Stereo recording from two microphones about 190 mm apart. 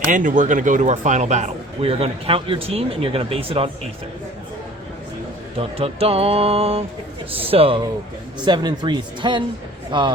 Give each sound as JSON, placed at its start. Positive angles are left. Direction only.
{"t": 0.0, "sound": "a man's voice", "side_deg": -45}
{"t": 5.5, "sound": "a man's voice", "side_deg": -30}